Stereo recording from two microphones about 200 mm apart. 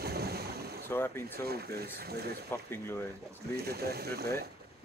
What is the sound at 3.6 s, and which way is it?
Speech, 50° right (ahead or behind).